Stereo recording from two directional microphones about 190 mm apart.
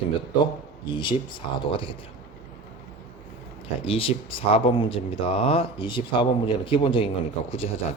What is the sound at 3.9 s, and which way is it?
Speech, 30° left (ahead or behind).